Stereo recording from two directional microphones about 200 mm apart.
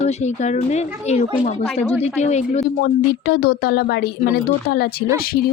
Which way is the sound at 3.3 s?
50° left (ahead or behind).